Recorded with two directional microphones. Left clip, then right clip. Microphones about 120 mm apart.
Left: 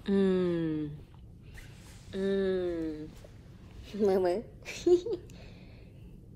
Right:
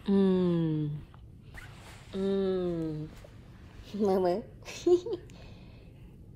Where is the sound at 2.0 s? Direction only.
20° right (ahead or behind).